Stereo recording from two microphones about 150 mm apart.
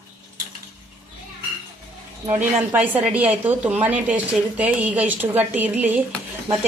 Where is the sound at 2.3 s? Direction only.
10° right (ahead or behind).